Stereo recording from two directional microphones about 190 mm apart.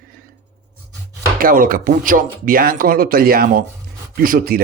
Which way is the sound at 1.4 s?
50° right (ahead or behind).